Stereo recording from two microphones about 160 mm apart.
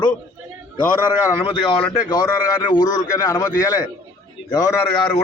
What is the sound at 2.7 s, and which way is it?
A man's voice, 25° left (ahead or behind).